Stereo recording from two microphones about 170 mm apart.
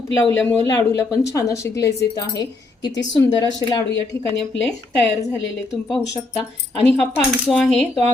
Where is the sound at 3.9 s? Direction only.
90° left.